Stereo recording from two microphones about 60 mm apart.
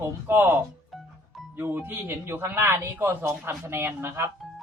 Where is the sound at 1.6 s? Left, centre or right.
Right.